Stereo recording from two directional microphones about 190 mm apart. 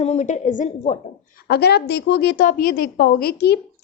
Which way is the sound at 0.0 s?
35° left (ahead or behind).